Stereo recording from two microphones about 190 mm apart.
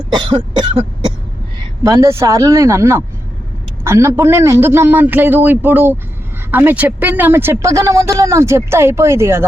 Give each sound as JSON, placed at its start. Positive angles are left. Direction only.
{"t": 0.1, "sound": "cough", "side_deg": -25}
{"t": 1.8, "sound": "speech", "side_deg": -15}